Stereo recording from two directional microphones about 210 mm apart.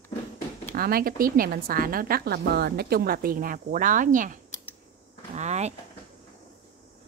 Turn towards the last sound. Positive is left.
turn(degrees=-30)  # may be behind; listen again after turning